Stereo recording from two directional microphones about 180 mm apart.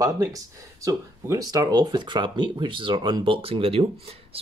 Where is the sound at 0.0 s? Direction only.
20° right (ahead or behind).